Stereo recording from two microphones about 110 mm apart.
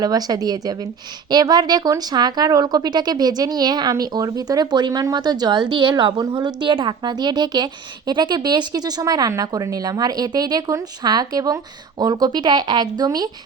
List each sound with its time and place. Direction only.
0.0 s speech: 35° right (ahead or behind)